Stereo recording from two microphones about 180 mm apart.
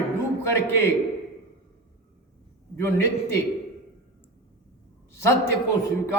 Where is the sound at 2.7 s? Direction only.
15° left (ahead or behind).